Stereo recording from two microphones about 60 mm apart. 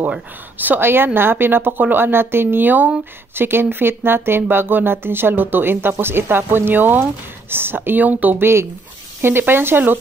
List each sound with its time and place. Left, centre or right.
0.6 s speech: right